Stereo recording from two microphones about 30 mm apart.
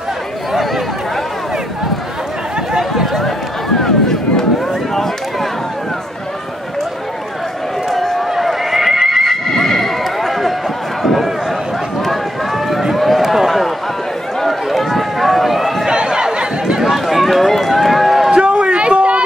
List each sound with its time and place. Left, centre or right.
0.5 s chatter: centre
3.1 s run: centre
4.9 s a sound: centre
7.9 s run: centre
8.4 s neigh: centre
9.5 s neigh: centre
12.0 s run: centre
13.2 s run: centre
14.7 s run: centre
15.9 s a sound: right
16.9 s run: centre
18.3 s a sound: right